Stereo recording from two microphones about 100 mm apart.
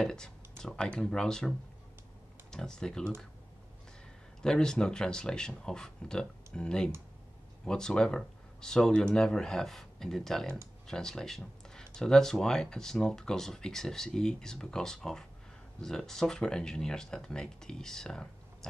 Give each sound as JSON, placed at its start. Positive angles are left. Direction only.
{"t": 0.0, "sound": "speech", "side_deg": 5}
{"t": 2.5, "sound": "speech", "side_deg": 5}
{"t": 4.4, "sound": "speech", "side_deg": 5}